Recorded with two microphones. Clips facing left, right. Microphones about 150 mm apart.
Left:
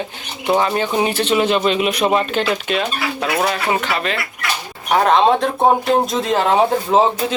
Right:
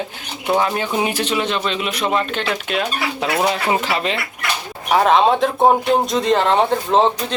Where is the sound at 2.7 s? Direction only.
Centre (ahead or behind).